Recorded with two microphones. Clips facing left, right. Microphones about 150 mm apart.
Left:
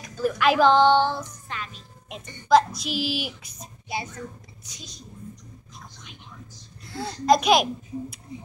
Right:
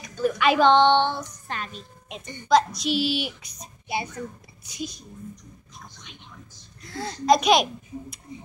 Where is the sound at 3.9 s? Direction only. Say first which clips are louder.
Right 3 dB; 15° right (ahead or behind).